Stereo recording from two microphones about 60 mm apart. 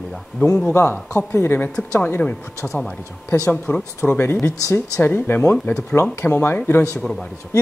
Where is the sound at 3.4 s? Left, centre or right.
Left.